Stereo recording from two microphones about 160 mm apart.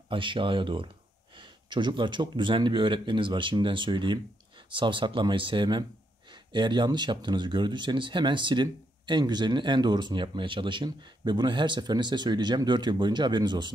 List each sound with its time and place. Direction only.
0.1 s speech: 30° right (ahead or behind)